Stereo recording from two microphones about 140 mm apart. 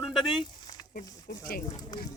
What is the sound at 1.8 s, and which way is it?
Speech, 35° left (ahead or behind).